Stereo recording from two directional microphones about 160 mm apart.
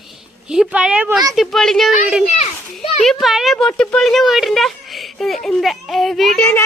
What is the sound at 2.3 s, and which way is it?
Children playing, 40° left (ahead or behind).